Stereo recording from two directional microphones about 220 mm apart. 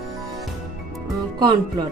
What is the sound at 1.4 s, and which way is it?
Speech, 20° right (ahead or behind).